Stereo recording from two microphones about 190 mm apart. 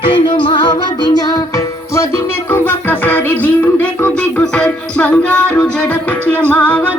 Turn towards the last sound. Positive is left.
turn(degrees=5)  # may be behind; listen again after turning